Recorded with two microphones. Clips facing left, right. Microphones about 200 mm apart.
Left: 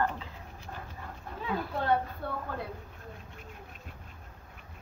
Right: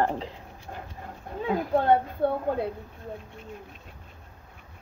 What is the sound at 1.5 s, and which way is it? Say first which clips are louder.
Speech: right 7 dB; 50° right (ahead or behind).